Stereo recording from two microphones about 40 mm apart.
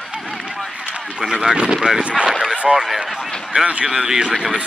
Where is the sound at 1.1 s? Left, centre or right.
Centre.